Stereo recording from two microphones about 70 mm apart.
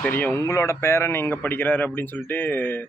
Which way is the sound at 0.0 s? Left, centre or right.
Left.